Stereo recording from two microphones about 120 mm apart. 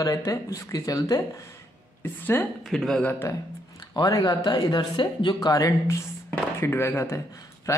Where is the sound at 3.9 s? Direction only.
30° left (ahead or behind).